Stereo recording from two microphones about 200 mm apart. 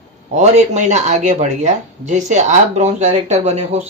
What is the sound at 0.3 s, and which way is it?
Speech, 35° right (ahead or behind).